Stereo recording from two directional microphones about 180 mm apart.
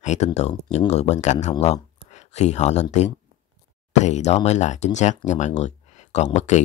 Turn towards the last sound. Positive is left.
turn(degrees=40)  # may be behind; listen again after turning